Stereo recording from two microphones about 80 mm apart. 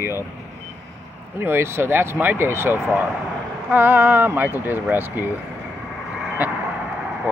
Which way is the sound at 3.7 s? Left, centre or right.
Right.